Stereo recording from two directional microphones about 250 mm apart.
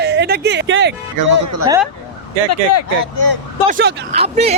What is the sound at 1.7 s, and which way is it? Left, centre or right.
Speech, centre.